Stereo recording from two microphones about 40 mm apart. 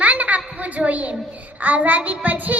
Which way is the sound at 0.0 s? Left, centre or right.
Right.